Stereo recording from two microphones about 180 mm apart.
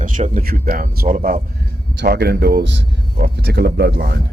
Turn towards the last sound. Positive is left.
turn(degrees=-65)  # may be behind; listen again after turning